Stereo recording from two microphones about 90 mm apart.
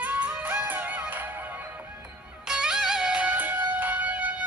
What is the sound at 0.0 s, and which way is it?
Music, 20° right (ahead or behind).